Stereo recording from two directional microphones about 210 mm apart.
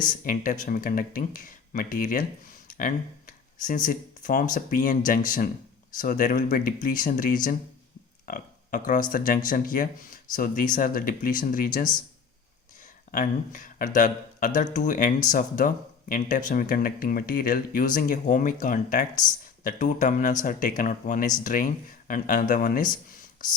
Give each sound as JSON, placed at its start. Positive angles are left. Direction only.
{"t": 0.3, "sound": "speech", "side_deg": 40}
{"t": 2.6, "sound": "a sound", "side_deg": 35}
{"t": 3.8, "sound": "speech", "side_deg": 40}
{"t": 13.1, "sound": "speech", "side_deg": 40}